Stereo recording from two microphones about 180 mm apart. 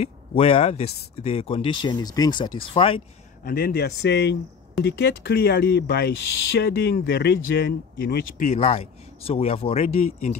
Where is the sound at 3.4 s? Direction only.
55° left (ahead or behind).